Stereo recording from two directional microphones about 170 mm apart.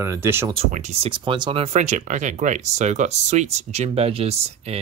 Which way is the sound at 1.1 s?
30° right (ahead or behind).